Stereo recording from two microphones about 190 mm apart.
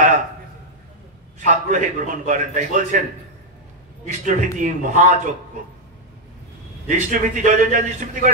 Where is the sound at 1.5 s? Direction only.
45° right (ahead or behind).